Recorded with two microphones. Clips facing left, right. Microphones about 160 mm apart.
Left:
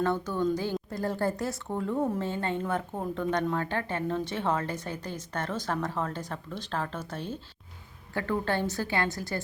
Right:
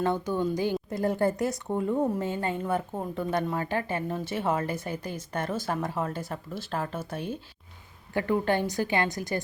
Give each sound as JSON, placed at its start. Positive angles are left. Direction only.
{"t": 0.0, "sound": "a woman's voice", "side_deg": -15}